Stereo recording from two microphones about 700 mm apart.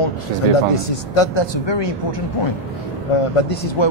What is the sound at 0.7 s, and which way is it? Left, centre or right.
Speech, left.